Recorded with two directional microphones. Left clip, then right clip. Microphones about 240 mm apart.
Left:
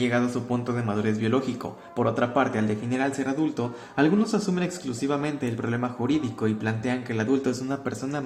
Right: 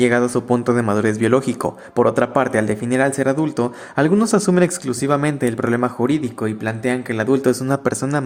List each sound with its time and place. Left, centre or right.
0.0 s a man's voice: right